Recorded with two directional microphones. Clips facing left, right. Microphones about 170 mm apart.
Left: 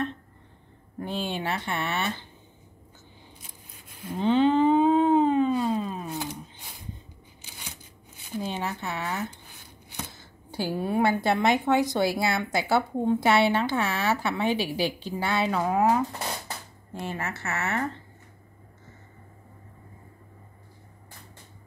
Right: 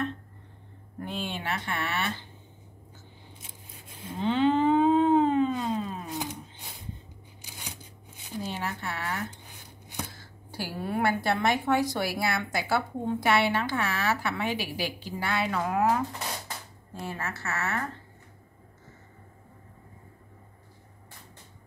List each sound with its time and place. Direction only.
1.0 s speech: 30° left (ahead or behind)
4.1 s moo: 20° left (ahead or behind)
5.6 s a sound: 20° left (ahead or behind)
8.5 s a woman's voice: 20° left (ahead or behind)
15.5 s a woman's voice: 10° left (ahead or behind)